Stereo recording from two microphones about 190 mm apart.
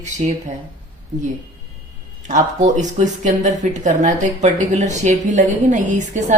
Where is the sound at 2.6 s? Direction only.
40° right (ahead or behind).